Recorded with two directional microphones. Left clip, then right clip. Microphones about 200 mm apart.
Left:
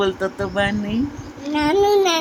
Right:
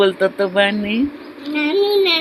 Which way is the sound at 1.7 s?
50° left (ahead or behind).